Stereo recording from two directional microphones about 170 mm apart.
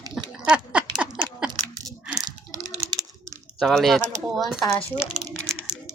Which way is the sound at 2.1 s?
25° right (ahead or behind).